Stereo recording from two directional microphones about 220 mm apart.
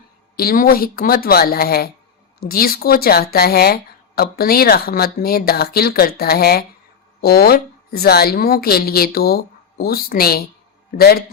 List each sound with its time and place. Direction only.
0.3 s speech: 40° left (ahead or behind)